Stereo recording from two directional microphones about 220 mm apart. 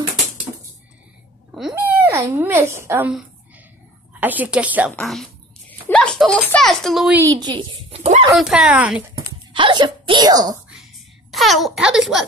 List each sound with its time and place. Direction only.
1.5 s a woman's voice: centre (ahead or behind)
7.2 s a woman's voice: 15° right (ahead or behind)
8.4 s speech: 5° right (ahead or behind)
9.5 s speech: 20° right (ahead or behind)
11.3 s speech: centre (ahead or behind)